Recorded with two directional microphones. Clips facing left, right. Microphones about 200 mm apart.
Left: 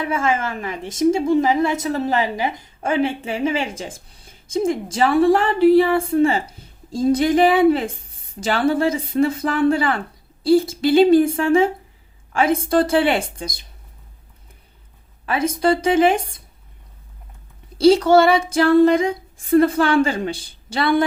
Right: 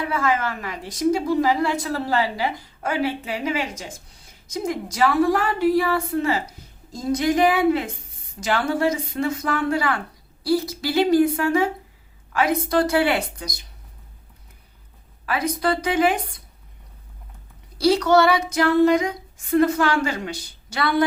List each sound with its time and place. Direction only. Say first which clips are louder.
0.0 s a woman's voice: left 2 dB; 25° left (ahead or behind)
15.3 s a woman's voice: left 4 dB; 25° left (ahead or behind)
17.7 s a woman's voice: left 4 dB; 25° left (ahead or behind)